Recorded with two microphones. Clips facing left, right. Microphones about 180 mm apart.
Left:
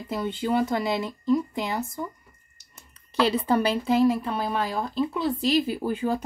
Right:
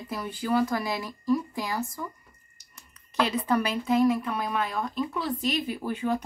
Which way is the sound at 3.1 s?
30° left (ahead or behind).